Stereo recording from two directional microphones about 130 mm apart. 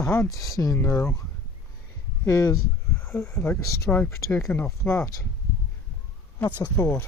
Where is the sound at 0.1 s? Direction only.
25° left (ahead or behind).